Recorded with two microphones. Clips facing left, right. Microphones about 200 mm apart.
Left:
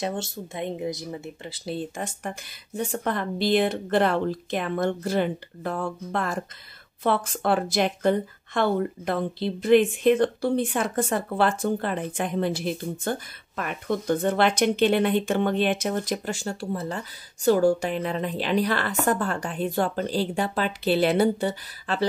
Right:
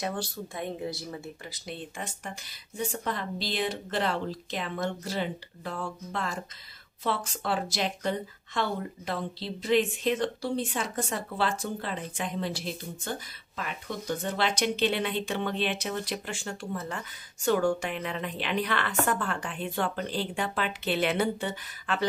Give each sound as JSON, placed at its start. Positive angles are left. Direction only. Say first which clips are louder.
{"t": 0.0, "sound": "a woman's voice", "louder": "left 3 dB", "side_deg": 25}